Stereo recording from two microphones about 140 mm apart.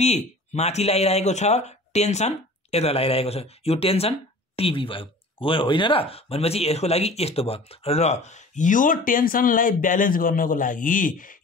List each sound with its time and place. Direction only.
0.0 s speech: 50° left (ahead or behind); by 11.3 s 75° left (ahead or behind)